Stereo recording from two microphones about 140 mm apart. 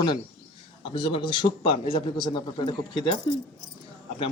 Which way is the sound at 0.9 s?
40° left (ahead or behind).